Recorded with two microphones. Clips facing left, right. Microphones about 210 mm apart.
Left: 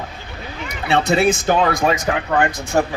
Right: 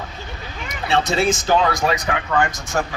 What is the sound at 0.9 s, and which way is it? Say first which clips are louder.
Speech: left 3 dB; 60° left (ahead or behind).